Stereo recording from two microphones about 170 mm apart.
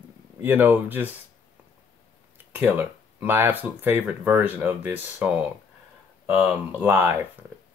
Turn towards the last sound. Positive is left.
turn(degrees=-15)  # may be behind; listen again after turning